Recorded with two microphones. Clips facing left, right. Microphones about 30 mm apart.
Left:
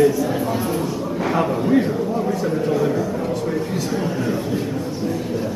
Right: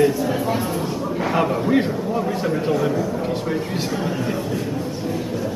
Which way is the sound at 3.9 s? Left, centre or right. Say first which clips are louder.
Left 2 dB; centre.